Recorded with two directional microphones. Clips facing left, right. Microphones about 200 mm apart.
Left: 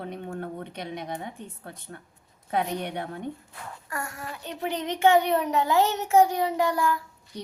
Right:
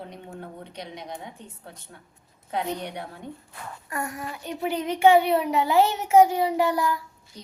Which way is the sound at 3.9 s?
20° right (ahead or behind).